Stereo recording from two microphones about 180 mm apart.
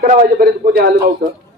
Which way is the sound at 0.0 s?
55° right (ahead or behind).